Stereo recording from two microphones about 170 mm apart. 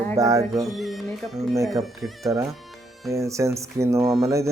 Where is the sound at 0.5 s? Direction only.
Centre (ahead or behind).